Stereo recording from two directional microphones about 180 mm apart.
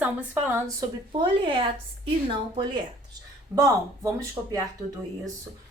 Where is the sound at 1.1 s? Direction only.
30° right (ahead or behind).